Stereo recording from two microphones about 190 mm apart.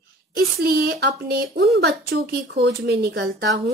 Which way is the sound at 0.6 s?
55° right (ahead or behind).